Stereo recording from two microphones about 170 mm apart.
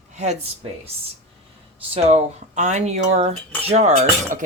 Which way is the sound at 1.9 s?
40° right (ahead or behind).